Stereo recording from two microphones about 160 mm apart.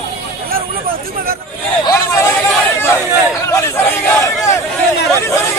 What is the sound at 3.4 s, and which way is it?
Speech, 15° left (ahead or behind).